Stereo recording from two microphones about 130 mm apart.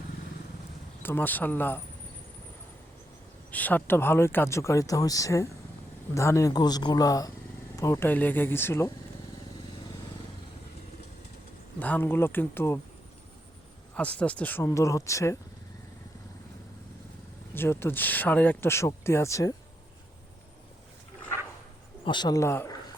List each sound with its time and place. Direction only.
1.0 s speech: 15° left (ahead or behind)
3.5 s speech: 10° left (ahead or behind)
11.8 s speech: 15° left (ahead or behind)
13.9 s speech: 10° left (ahead or behind)
17.5 s speech: 15° left (ahead or behind)
22.0 s speech: 35° left (ahead or behind); by 22.7 s 20° left (ahead or behind)